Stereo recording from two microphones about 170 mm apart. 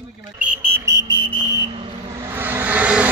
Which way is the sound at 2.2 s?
10° right (ahead or behind).